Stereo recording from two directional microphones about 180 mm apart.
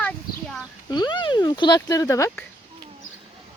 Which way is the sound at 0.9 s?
25° left (ahead or behind).